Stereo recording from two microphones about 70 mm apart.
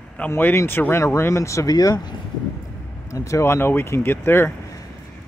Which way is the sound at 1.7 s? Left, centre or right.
Left.